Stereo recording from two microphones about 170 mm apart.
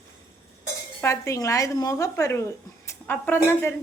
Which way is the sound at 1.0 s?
15° left (ahead or behind).